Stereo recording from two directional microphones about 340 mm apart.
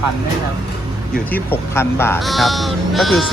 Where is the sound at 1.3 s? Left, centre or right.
Centre.